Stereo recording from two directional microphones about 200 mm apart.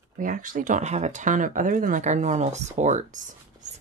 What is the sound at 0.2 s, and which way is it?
Speech, 40° right (ahead or behind).